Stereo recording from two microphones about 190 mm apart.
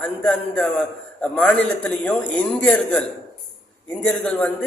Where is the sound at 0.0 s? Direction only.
5° left (ahead or behind).